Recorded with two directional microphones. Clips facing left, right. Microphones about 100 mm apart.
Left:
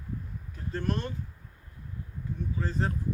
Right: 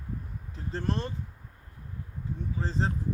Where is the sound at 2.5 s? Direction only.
25° right (ahead or behind).